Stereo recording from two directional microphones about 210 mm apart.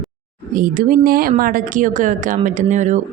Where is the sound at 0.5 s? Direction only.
40° right (ahead or behind).